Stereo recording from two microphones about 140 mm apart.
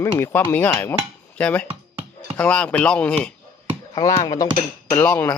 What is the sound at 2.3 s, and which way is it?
Dishes, 10° left (ahead or behind).